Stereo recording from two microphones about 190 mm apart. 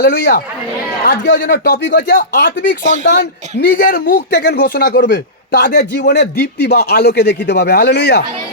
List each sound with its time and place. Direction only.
0.0 s a man's voice: 50° left (ahead or behind)
3.9 s speech: 45° left (ahead or behind)
4.3 s a man's voice: 65° left (ahead or behind)